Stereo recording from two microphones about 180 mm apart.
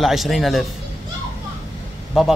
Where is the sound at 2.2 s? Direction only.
5° right (ahead or behind).